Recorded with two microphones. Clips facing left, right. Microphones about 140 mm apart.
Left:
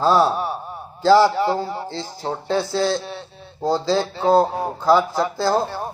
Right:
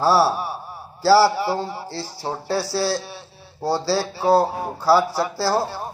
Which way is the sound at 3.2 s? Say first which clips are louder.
Left 3 dB; 20° left (ahead or behind).